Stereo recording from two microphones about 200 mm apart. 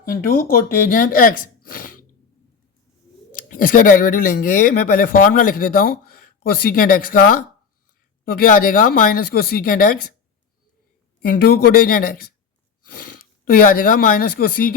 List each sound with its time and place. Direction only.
0.0 s speech: 45° left (ahead or behind)
3.3 s speech: 45° left (ahead or behind)
11.3 s speech: 50° left (ahead or behind)
13.5 s speech: 45° left (ahead or behind)